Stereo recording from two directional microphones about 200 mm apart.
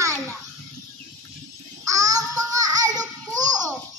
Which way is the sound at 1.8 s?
15° right (ahead or behind).